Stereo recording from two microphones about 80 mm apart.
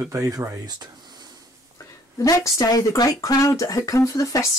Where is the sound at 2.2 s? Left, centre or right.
Left.